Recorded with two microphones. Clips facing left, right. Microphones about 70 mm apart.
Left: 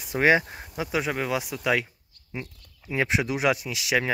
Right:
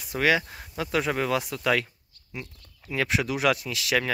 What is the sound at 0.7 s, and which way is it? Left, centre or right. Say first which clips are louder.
Speech: right 1 dB; centre.